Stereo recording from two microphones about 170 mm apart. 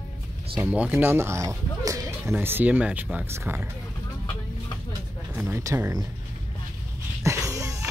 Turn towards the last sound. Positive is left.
turn(degrees=-15)  # may be behind; listen again after turning